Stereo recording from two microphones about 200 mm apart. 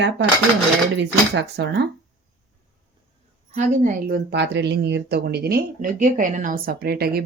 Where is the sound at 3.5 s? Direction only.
40° right (ahead or behind).